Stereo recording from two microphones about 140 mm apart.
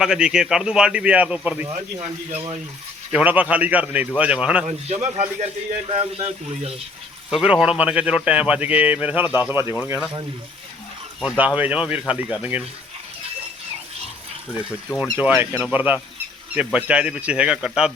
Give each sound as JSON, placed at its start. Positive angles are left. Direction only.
{"t": 0.0, "sound": "a man's voice", "side_deg": -5}
{"t": 1.7, "sound": "speech", "side_deg": -45}
{"t": 3.1, "sound": "speech", "side_deg": -10}
{"t": 4.6, "sound": "speech", "side_deg": -50}
{"t": 7.3, "sound": "speech", "side_deg": -5}
{"t": 11.2, "sound": "speech", "side_deg": -5}
{"t": 15.2, "sound": "speech", "side_deg": -10}